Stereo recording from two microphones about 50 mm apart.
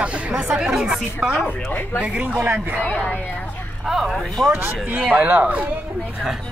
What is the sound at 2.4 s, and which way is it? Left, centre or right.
Speech, right.